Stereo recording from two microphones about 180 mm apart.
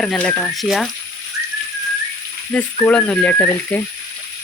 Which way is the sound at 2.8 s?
5° left (ahead or behind).